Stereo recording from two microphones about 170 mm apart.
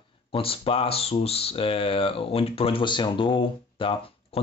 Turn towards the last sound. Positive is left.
turn(degrees=30)  # may be behind; listen again after turning